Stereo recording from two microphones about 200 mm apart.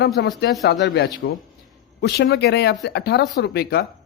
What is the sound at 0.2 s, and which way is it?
Speech, 55° left (ahead or behind).